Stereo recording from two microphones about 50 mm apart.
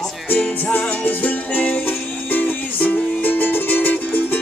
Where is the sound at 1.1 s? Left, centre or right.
Left.